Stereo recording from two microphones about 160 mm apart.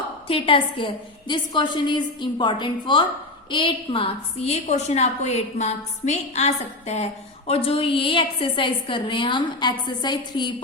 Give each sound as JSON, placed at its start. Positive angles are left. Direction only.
{"t": 0.3, "sound": "a woman's voice", "side_deg": 35}